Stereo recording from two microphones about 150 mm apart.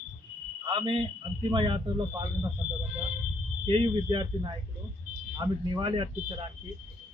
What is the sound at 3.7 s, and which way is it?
Speech, 35° right (ahead or behind).